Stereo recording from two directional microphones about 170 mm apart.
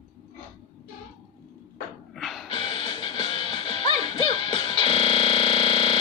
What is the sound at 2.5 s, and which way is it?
Music, 30° left (ahead or behind).